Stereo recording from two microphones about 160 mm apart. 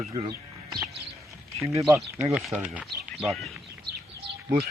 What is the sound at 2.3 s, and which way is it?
Speech, 5° right (ahead or behind).